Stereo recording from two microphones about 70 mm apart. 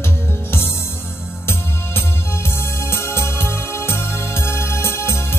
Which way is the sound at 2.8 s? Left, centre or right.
Left.